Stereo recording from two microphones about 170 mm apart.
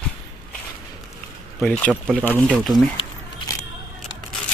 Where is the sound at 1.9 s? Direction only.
10° right (ahead or behind).